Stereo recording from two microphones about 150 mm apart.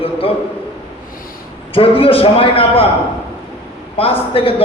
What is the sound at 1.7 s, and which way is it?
A man's voice, 35° left (ahead or behind).